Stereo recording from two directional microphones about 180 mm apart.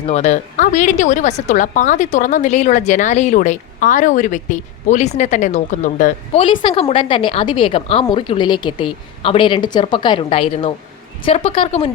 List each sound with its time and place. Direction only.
0.0 s speech: 35° left (ahead or behind)
6.4 s a woman's voice: 30° left (ahead or behind)